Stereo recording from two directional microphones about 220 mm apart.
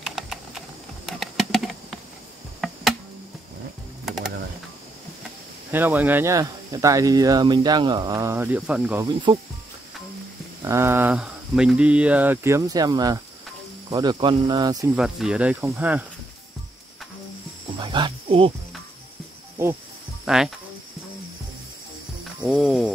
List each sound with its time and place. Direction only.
0.0 s typing: centre (ahead or behind)
5.7 s speech: 10° right (ahead or behind)
9.0 s speech: 20° right (ahead or behind)
10.6 s speech: 10° right (ahead or behind)
15.0 s speech: centre (ahead or behind)
17.7 s music: 20° right (ahead or behind)
20.2 s speech: centre (ahead or behind)
22.5 s cricket: centre (ahead or behind)